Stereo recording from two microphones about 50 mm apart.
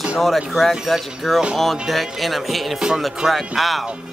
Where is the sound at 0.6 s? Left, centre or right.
Centre.